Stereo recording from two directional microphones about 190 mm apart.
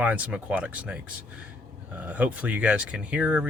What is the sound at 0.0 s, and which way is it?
A man's voice, 5° right (ahead or behind).